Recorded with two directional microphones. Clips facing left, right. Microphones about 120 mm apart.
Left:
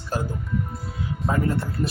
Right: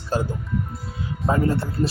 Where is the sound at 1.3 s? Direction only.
30° right (ahead or behind).